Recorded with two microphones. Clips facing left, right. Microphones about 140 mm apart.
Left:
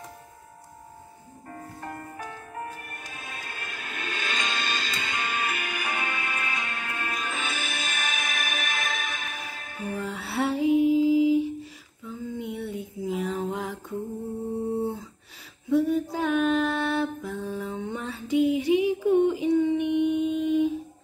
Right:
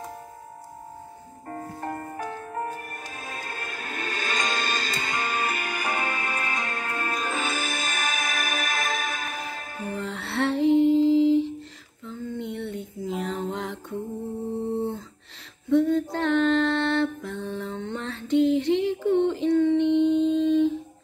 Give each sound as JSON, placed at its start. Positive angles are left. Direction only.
{"t": 1.5, "sound": "music", "side_deg": -40}
{"t": 9.9, "sound": "music", "side_deg": 5}
{"t": 12.0, "sound": "a sound", "side_deg": 5}
{"t": 15.7, "sound": "mantra", "side_deg": 10}